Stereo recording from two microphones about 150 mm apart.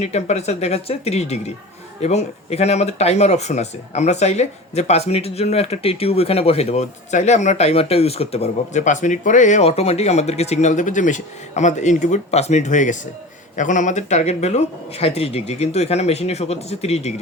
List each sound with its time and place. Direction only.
0.0 s speech: 45° left (ahead or behind)